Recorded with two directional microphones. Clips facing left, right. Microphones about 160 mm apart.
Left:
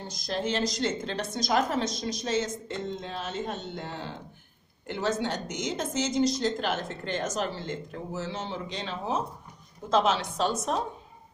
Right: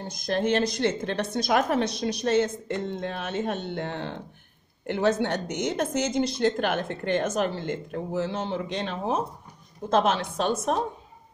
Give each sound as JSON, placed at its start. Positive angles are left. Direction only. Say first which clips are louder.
{"t": 0.0, "sound": "speech", "louder": "right 5 dB", "side_deg": -55}